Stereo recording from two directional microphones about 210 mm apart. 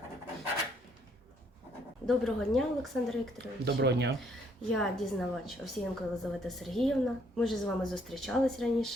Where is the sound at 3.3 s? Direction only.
55° right (ahead or behind).